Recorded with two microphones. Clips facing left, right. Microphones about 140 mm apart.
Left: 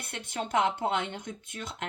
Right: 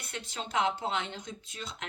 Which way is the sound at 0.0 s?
55° left (ahead or behind).